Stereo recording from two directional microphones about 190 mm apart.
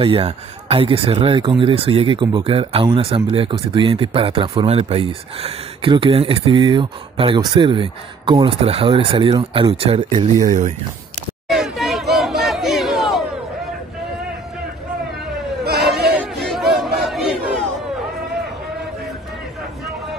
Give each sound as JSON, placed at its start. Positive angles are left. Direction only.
{"t": 0.0, "sound": "a man's voice", "side_deg": -30}
{"t": 11.4, "sound": "a sound", "side_deg": 0}
{"t": 15.6, "sound": "bleat", "side_deg": -55}
{"t": 16.1, "sound": "battle cry", "side_deg": 0}